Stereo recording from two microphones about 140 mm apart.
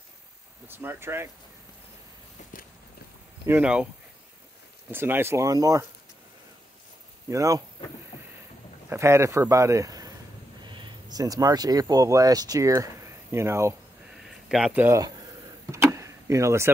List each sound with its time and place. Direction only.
0.7 s speech: 15° right (ahead or behind)
3.4 s speech: 10° right (ahead or behind)
4.9 s speech: 15° right (ahead or behind)
7.2 s speech: 25° right (ahead or behind)
8.8 s a man's voice: 20° right (ahead or behind)
14.2 s a sound: 5° right (ahead or behind)
15.0 s a sound: 25° right (ahead or behind)
15.7 s power windows: 20° right (ahead or behind)